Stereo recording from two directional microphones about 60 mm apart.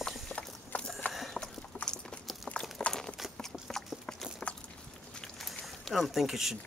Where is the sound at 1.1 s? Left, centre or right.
Centre.